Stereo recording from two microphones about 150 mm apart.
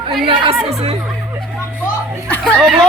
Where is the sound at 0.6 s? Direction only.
45° right (ahead or behind).